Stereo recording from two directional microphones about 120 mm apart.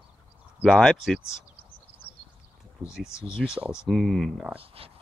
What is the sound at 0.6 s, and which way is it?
Speech, centre (ahead or behind).